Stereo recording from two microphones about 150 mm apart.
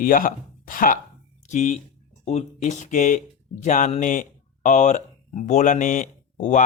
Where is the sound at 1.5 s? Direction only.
55° left (ahead or behind).